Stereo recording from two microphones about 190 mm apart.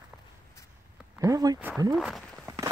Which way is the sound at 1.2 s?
20° right (ahead or behind).